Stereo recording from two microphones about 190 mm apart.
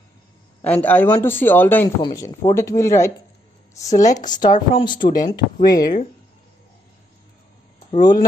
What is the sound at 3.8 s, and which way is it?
Speech, 40° left (ahead or behind).